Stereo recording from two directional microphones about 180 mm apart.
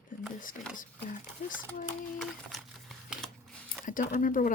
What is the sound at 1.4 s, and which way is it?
Speech, 50° left (ahead or behind).